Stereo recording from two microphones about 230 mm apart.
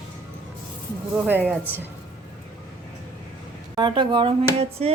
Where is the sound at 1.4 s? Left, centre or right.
Centre.